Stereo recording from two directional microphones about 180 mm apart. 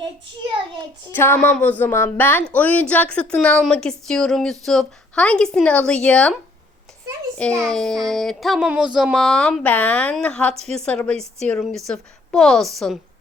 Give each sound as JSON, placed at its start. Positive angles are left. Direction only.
{"t": 1.1, "sound": "speech", "side_deg": 10}
{"t": 7.6, "sound": "speech", "side_deg": 5}
{"t": 10.5, "sound": "a woman's voice", "side_deg": -35}
{"t": 10.8, "sound": "speech", "side_deg": 5}